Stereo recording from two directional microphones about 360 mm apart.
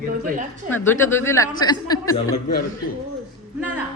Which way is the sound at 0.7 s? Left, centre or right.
Centre.